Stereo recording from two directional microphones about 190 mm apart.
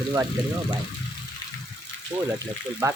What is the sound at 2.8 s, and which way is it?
Speech, 15° right (ahead or behind).